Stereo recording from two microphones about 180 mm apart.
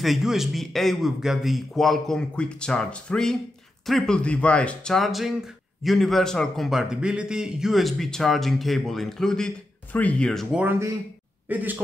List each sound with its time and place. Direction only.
0.0 s speech: centre (ahead or behind)
10.6 s speech: 10° right (ahead or behind)